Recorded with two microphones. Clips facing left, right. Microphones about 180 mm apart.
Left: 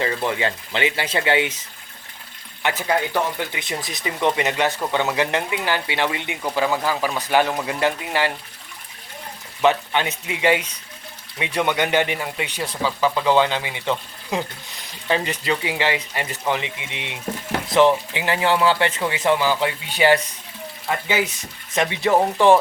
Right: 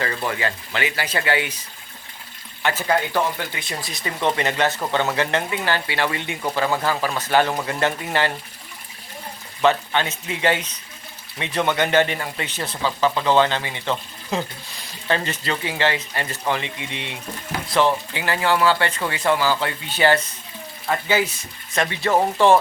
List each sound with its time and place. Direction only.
0.0 s speech: 25° left (ahead or behind)
2.6 s speech: 15° left (ahead or behind)
9.6 s speech: 15° left (ahead or behind)
21.8 s speech: 20° left (ahead or behind)